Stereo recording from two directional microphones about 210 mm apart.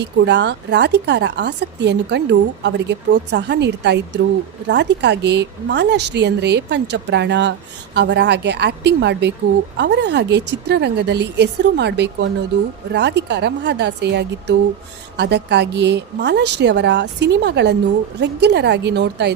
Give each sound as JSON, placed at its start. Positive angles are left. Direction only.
{"t": 0.0, "sound": "a woman's voice", "side_deg": -55}